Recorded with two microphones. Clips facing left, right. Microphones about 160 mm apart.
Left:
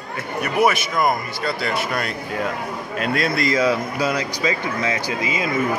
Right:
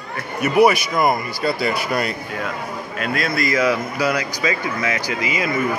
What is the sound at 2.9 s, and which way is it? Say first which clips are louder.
A man's voice: left 1 dB; 35° left (ahead or behind).